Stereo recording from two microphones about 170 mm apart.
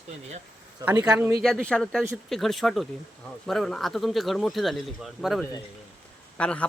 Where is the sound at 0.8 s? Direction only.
20° right (ahead or behind).